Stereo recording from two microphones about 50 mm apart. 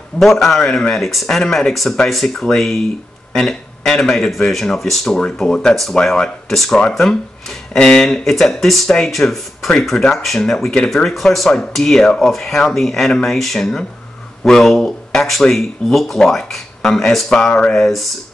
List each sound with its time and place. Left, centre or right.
0.2 s speech: centre
6.5 s speech: centre
17.3 s speech: centre
17.7 s speech: centre